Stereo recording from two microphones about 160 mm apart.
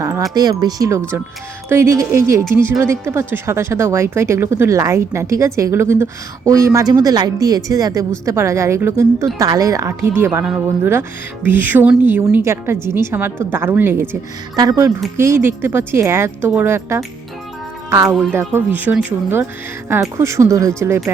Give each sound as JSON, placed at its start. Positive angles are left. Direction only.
{"t": 0.0, "sound": "a woman's voice", "side_deg": -20}
{"t": 14.5, "sound": "a woman's voice", "side_deg": -25}